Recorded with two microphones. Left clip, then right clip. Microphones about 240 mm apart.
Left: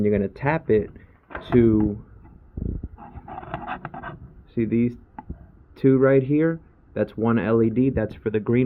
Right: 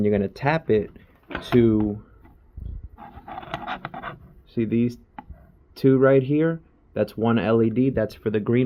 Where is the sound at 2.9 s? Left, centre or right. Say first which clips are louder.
Right 1 dB; right.